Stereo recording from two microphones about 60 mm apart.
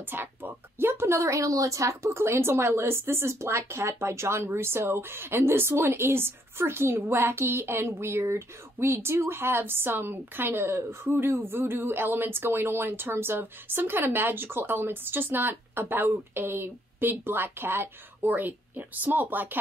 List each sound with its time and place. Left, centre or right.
0.1 s a woman's voice: right